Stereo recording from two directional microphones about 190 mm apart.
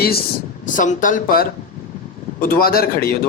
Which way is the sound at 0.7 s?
45° left (ahead or behind).